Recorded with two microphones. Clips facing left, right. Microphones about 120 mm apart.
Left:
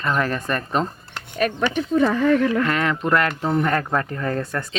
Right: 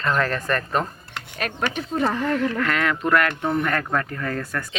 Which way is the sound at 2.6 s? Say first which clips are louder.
Left 2 dB; 25° left (ahead or behind).